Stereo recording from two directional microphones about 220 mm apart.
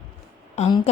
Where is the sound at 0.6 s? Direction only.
30° left (ahead or behind).